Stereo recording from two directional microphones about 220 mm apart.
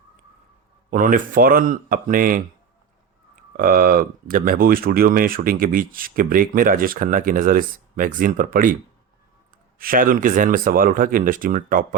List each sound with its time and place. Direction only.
0.9 s speech: 35° right (ahead or behind)
3.6 s speech: 40° right (ahead or behind)
9.7 s speech: 40° right (ahead or behind)